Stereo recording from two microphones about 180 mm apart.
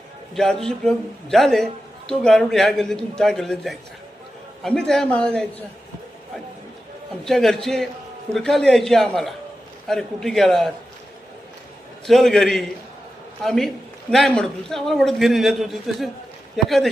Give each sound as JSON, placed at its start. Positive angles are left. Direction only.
{"t": 0.3, "sound": "a man's voice", "side_deg": 5}
{"t": 7.3, "sound": "a man's voice", "side_deg": 5}
{"t": 12.0, "sound": "a man's voice", "side_deg": 0}